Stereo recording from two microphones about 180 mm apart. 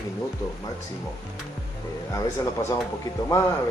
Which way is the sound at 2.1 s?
15° left (ahead or behind).